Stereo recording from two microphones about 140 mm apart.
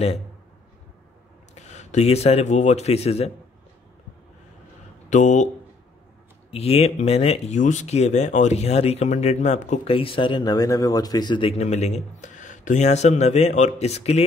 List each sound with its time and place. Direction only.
1.5 s speech: 55° left (ahead or behind)
5.1 s speech: 60° left (ahead or behind)
6.5 s speech: 45° left (ahead or behind)
9.9 s speech: 40° left (ahead or behind)